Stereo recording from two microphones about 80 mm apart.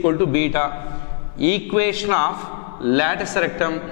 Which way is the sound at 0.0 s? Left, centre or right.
Centre.